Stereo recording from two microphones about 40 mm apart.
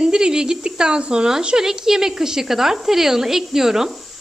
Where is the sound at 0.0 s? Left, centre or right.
Centre.